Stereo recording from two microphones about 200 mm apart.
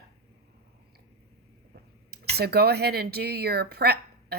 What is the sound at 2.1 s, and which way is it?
Speech, 50° right (ahead or behind).